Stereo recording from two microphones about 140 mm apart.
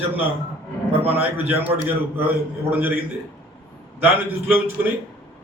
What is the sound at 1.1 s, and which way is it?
A man's voice, 15° right (ahead or behind).